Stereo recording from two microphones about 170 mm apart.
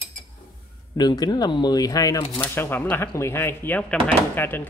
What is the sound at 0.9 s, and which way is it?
Speech, 25° left (ahead or behind).